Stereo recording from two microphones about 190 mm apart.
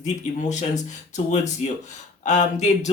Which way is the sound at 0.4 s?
40° left (ahead or behind).